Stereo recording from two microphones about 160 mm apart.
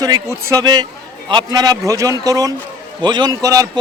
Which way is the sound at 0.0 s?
20° right (ahead or behind).